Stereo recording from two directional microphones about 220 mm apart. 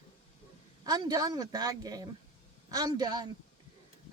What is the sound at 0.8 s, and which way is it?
A woman's voice, 15° right (ahead or behind).